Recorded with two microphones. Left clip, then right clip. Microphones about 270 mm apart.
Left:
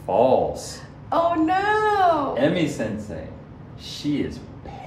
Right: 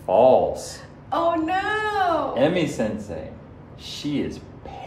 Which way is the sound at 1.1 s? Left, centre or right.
Centre.